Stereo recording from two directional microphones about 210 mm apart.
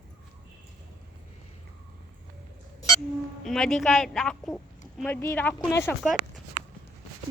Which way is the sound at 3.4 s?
Centre (ahead or behind).